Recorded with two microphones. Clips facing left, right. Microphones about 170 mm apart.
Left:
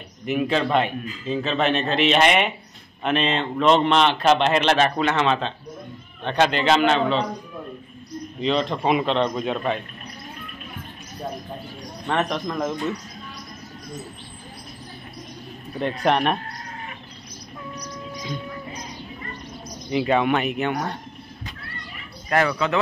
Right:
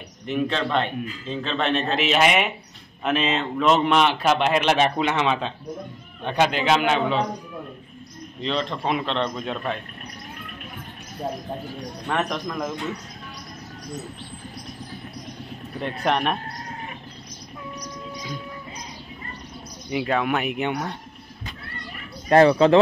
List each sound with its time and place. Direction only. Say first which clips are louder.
0.3 s a man's voice: left 3 dB; 10° left (ahead or behind); by 7.2 s 10° right (ahead or behind)
8.4 s a man's voice: left 4 dB; 5° left (ahead or behind)
12.1 s a man's voice: left 2 dB; centre (ahead or behind)
15.8 s a man's voice: left 3 dB; centre (ahead or behind)
19.9 s a man's voice: left 3 dB; centre (ahead or behind)
22.3 s speech: right 7 dB; 30° right (ahead or behind)